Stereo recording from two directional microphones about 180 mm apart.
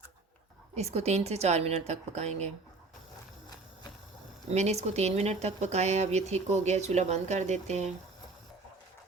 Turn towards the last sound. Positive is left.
turn(degrees=-40)  # may be behind; listen again after turning